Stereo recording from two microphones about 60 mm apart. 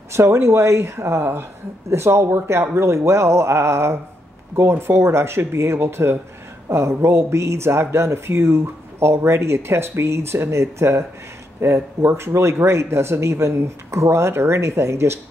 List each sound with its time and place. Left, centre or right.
0.1 s speech: right